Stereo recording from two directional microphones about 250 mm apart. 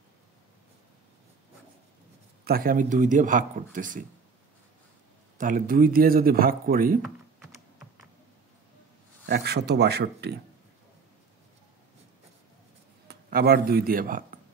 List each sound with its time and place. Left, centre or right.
2.4 s speech: right
5.4 s speech: right
7.0 s typing: centre
9.2 s speech: right
13.1 s speech: right